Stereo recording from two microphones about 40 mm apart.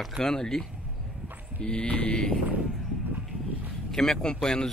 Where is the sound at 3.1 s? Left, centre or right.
Right.